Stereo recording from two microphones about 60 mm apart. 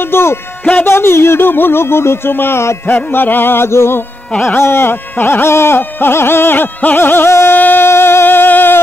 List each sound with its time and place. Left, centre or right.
0.0 s speech: left
2.9 s a sound: left
7.5 s music: left